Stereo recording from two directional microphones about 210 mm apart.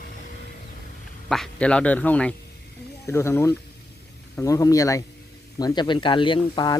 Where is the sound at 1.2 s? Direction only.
Centre (ahead or behind).